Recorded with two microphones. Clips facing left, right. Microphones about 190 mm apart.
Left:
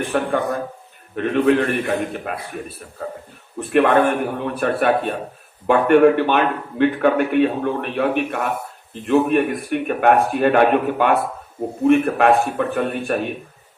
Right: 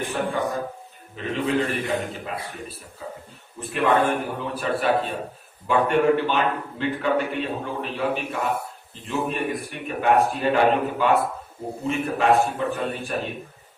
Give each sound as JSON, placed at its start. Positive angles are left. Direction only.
{"t": 0.1, "sound": "a man's voice", "side_deg": 60}